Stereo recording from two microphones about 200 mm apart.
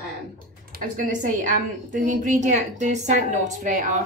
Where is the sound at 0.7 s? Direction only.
45° right (ahead or behind).